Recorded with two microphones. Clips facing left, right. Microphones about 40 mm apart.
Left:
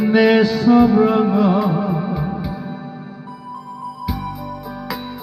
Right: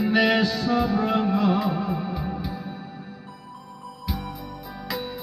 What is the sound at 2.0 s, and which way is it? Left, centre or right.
Music, left.